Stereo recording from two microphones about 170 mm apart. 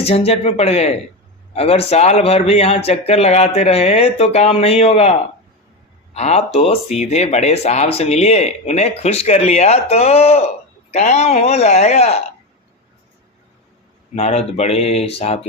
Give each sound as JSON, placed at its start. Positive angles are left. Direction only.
{"t": 0.0, "sound": "speech", "side_deg": 35}
{"t": 6.1, "sound": "speech", "side_deg": 40}
{"t": 14.2, "sound": "speech", "side_deg": 40}